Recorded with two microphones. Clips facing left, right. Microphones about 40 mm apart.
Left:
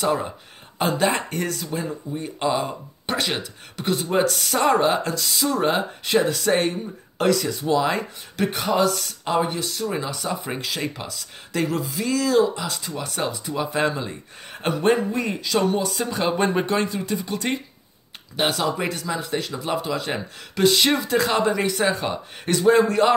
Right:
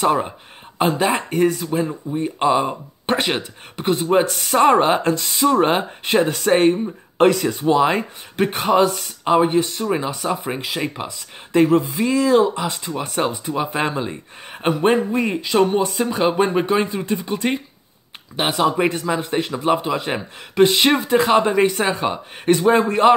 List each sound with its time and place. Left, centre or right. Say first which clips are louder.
0.0 s speech: right 5 dB; right
0.7 s speech: right 3 dB; centre
10.4 s speech: right 3 dB; centre
16.3 s speech: right 4 dB; centre
16.8 s speech: right 3 dB; right
18.7 s speech: right 6 dB; right